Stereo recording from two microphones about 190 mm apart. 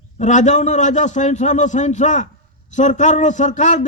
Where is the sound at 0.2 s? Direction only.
40° left (ahead or behind).